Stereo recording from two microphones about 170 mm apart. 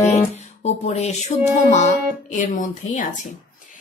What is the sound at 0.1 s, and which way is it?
Music, 45° left (ahead or behind).